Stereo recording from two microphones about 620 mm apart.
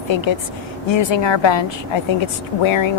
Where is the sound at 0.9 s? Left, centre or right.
Left.